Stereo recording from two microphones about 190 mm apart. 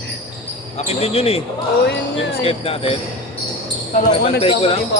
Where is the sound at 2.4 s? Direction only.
30° left (ahead or behind).